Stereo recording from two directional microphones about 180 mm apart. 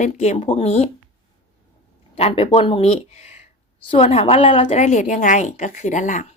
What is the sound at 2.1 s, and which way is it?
Speech, 35° left (ahead or behind).